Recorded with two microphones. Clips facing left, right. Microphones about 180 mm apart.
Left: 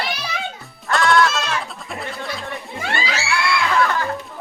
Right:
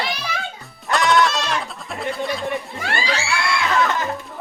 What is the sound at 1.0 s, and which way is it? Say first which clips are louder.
Sheep: left 1 dB; centre (ahead or behind).